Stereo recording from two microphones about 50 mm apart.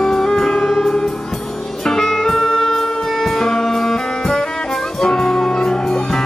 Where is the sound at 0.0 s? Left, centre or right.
Centre.